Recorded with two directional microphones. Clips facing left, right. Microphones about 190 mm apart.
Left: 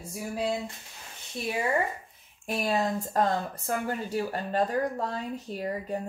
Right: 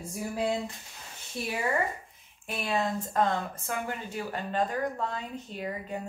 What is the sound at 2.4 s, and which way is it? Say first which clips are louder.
Speech: left 3 dB; 40° left (ahead or behind).